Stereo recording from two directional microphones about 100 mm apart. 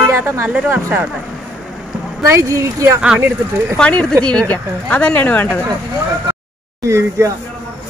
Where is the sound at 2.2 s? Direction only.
30° right (ahead or behind).